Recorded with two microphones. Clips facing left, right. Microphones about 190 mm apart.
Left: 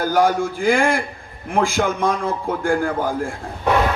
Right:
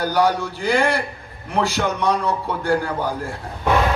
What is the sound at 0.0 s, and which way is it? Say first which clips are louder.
A man's voice: left 2 dB; 45° left (ahead or behind).